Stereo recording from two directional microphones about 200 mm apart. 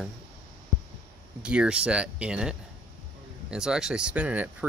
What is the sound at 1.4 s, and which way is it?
Speech, 5° right (ahead or behind).